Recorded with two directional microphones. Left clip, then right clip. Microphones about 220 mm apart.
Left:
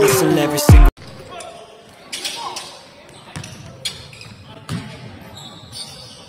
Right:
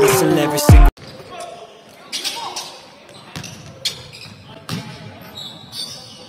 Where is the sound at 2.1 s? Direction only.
10° left (ahead or behind).